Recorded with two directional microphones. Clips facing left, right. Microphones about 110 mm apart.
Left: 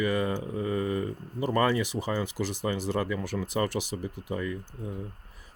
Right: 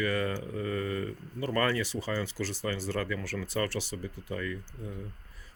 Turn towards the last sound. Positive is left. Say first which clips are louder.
# left 3 dB
turn(degrees=20)  # may be behind; listen again after turning